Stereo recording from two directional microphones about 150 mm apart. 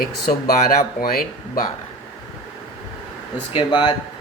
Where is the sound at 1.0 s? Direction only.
80° left.